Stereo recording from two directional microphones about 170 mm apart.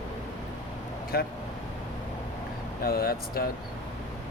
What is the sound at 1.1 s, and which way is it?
Speech, 65° left (ahead or behind).